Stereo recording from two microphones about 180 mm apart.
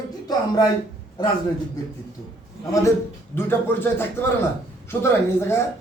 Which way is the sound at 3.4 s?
10° left (ahead or behind).